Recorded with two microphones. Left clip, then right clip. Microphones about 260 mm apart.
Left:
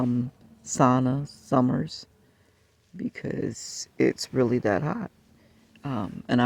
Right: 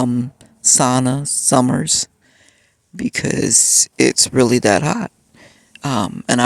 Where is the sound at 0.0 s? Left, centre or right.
Right.